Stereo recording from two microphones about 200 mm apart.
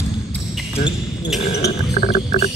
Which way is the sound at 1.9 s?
35° left (ahead or behind).